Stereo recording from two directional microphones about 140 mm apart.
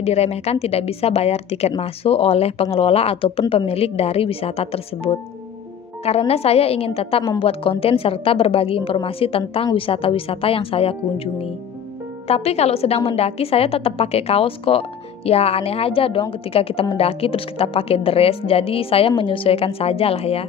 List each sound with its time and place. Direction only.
0.0 s a woman's voice: 50° left (ahead or behind)
12.3 s a woman's voice: 50° left (ahead or behind)